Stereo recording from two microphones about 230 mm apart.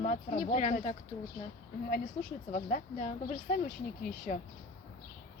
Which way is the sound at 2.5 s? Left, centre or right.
Left.